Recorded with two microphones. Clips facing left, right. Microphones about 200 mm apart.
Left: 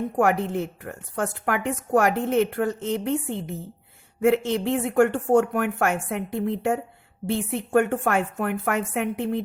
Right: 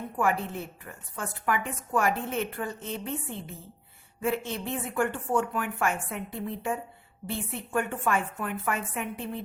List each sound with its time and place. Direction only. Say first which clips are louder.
0.2 s a woman's voice: left 6 dB; 75° left (ahead or behind)